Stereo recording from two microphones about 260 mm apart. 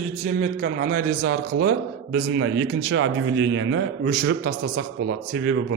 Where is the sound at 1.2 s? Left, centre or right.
Right.